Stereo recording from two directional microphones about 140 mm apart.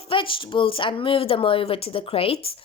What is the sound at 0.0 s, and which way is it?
Speech, 40° left (ahead or behind).